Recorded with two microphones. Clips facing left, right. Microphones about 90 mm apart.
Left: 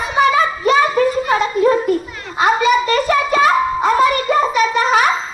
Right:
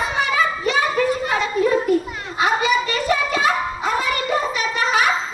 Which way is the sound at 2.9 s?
45° left (ahead or behind).